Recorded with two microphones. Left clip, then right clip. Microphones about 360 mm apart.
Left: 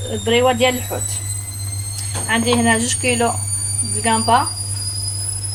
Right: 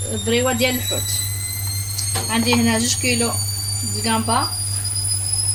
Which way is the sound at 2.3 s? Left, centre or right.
Left.